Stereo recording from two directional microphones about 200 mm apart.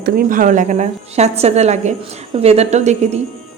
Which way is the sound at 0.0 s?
45° right (ahead or behind).